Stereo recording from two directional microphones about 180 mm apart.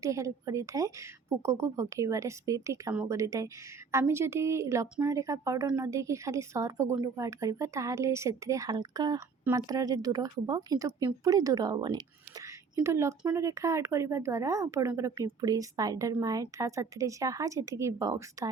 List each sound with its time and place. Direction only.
0.0 s a woman's voice: 15° right (ahead or behind)